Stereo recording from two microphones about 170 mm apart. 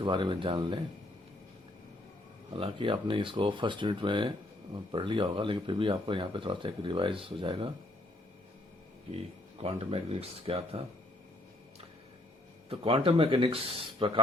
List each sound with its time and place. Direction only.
0.0 s speech: 30° right (ahead or behind)
2.5 s speech: 35° right (ahead or behind)
9.1 s speech: 35° right (ahead or behind)
12.6 s speech: 35° right (ahead or behind)